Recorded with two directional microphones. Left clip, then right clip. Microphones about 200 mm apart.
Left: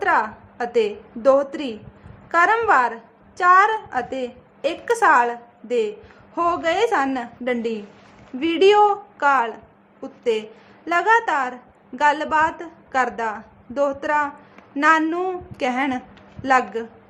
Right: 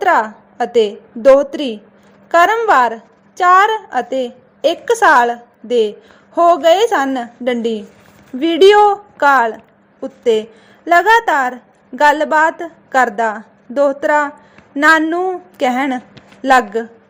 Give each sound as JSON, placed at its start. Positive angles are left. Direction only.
{"t": 0.0, "sound": "a woman's voice", "side_deg": -25}
{"t": 15.0, "sound": "a woman's voice", "side_deg": -10}
{"t": 15.5, "sound": "a woman's voice", "side_deg": -25}